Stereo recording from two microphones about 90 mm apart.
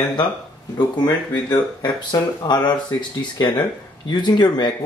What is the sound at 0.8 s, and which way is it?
Speech, 50° left (ahead or behind).